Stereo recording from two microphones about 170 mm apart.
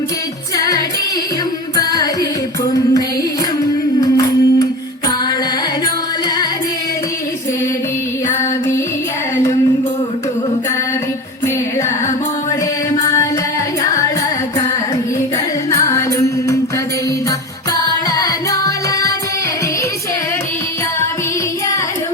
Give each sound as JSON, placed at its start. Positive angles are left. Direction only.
{"t": 0.5, "sound": "music", "side_deg": 20}
{"t": 3.6, "sound": "music", "side_deg": 20}
{"t": 8.3, "sound": "music", "side_deg": 15}
{"t": 15.7, "sound": "music", "side_deg": 20}
{"t": 18.1, "sound": "music", "side_deg": 20}